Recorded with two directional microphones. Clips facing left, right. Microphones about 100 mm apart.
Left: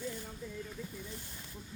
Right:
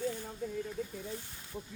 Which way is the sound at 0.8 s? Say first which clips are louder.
Right 6 dB; 65° right (ahead or behind).